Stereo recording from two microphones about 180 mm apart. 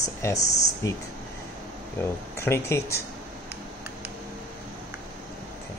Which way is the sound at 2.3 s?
15° left (ahead or behind).